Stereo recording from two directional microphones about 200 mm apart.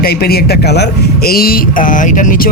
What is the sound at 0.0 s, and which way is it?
Speech, 50° left (ahead or behind).